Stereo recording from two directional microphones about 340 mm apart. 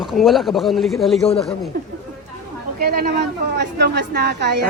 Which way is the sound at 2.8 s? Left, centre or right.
Right.